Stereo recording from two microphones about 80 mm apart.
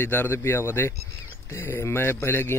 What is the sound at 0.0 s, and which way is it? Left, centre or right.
A man's voice, left.